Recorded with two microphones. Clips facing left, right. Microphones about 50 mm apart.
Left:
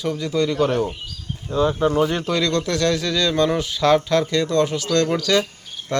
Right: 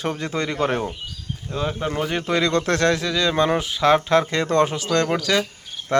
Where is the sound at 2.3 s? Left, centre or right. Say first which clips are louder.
Right 1 dB; right.